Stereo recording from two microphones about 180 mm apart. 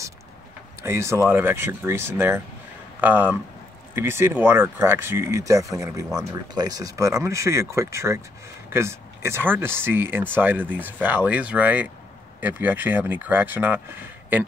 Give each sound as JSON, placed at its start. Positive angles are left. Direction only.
{"t": 0.8, "sound": "speech", "side_deg": -15}